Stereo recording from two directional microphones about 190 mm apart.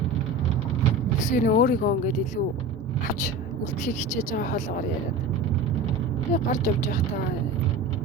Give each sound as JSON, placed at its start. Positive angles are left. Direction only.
{"t": 1.2, "sound": "speech", "side_deg": 40}
{"t": 3.8, "sound": "speech", "side_deg": 40}
{"t": 6.3, "sound": "speech", "side_deg": 45}